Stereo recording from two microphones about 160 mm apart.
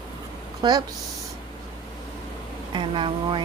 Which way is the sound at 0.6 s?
30° right (ahead or behind).